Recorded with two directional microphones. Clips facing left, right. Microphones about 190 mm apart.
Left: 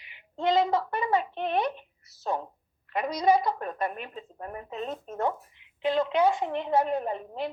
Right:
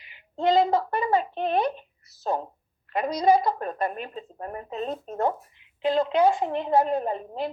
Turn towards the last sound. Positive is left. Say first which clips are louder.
# right 3 dB
turn(degrees=-35)  # may be behind; listen again after turning